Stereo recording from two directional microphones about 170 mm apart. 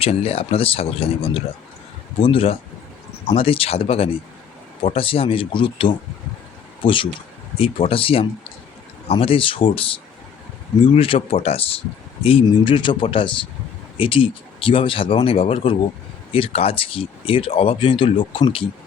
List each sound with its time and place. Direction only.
0.0 s speech: 35° left (ahead or behind)